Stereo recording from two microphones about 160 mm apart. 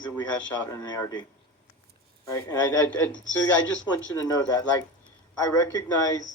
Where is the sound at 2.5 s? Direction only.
15° left (ahead or behind).